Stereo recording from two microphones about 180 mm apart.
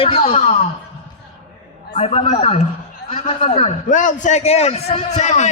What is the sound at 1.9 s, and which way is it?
A man's voice, 35° left (ahead or behind).